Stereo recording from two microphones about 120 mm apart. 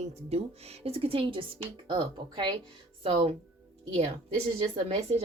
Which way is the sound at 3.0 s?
50° right (ahead or behind).